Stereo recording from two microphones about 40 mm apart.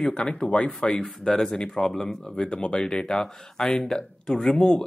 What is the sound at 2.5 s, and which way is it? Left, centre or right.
Speech, left.